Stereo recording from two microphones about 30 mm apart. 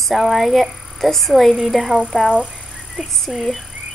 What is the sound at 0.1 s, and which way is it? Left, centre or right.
A woman's voice, centre.